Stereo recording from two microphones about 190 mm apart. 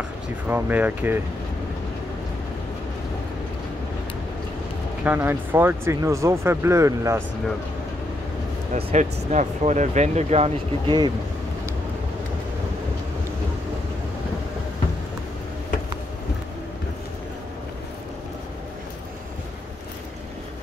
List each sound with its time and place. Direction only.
0.5 s speech: 10° right (ahead or behind)
5.0 s speech: 10° right (ahead or behind)
8.7 s speech: 40° right (ahead or behind)